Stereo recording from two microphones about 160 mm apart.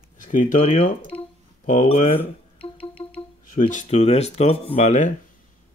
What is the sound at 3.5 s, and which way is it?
Speech, 55° left (ahead or behind).